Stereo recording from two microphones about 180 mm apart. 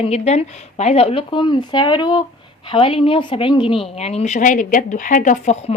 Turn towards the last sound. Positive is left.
turn(degrees=40)  # may be behind; listen again after turning